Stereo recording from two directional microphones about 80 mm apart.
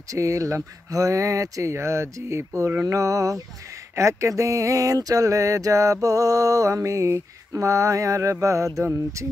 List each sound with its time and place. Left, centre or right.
0.1 s speech: right
3.9 s a sound: right
9.2 s speech: right